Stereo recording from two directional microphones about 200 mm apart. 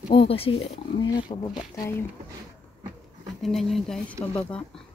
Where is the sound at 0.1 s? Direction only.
25° left (ahead or behind).